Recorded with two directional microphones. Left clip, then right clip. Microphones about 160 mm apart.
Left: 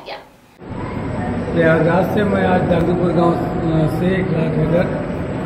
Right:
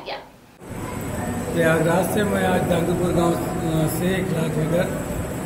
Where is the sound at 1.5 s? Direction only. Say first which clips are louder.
Left 5 dB; 15° right (ahead or behind).